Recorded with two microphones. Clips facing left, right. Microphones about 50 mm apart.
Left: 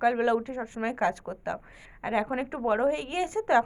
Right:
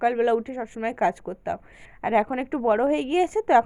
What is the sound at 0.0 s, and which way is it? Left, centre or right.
A woman's voice, right.